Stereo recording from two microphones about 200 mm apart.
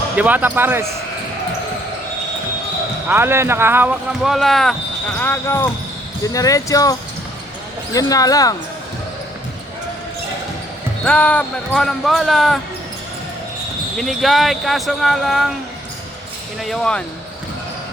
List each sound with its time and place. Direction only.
0.2 s speech: 10° right (ahead or behind)
3.1 s speech: 10° right (ahead or behind)
5.2 s speech: 10° left (ahead or behind)
7.9 s speech: 20° left (ahead or behind)
11.0 s speech: 5° left (ahead or behind)
13.9 s speech: centre (ahead or behind)
16.6 s speech: centre (ahead or behind)